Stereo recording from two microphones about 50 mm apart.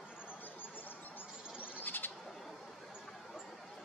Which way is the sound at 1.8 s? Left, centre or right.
Left.